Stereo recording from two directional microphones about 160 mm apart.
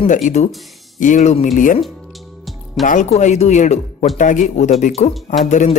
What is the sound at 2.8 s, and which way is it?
Speech, 50° left (ahead or behind).